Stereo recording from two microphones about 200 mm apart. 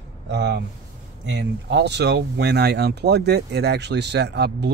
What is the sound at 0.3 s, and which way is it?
Speech, 60° right (ahead or behind).